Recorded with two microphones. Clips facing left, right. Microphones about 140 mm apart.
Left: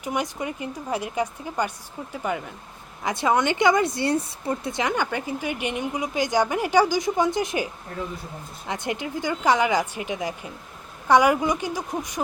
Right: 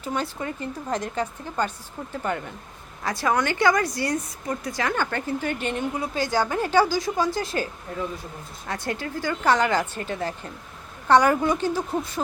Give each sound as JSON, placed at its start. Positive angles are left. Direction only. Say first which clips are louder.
{"t": 0.0, "sound": "speech", "louder": "left 1 dB", "side_deg": 15}
{"t": 3.0, "sound": "speech", "louder": "left 2 dB", "side_deg": 20}